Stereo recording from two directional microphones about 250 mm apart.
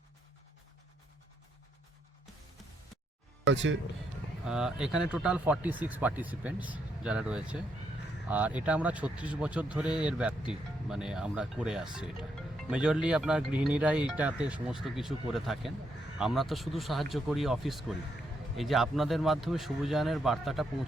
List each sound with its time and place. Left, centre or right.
3.4 s speech: right
4.4 s speech: centre